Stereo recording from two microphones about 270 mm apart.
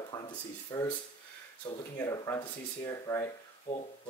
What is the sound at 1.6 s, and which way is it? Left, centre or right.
Speech, centre.